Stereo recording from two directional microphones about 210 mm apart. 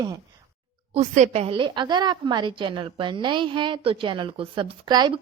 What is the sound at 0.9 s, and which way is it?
A woman's voice, 30° right (ahead or behind).